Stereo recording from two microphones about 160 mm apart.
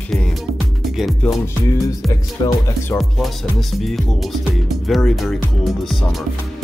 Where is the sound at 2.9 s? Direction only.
Centre (ahead or behind).